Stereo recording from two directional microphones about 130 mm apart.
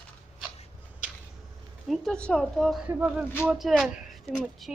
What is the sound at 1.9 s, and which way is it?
Speech, 5° left (ahead or behind).